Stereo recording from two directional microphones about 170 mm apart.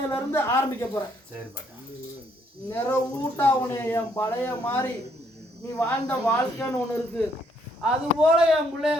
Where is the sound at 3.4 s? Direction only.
15° left (ahead or behind).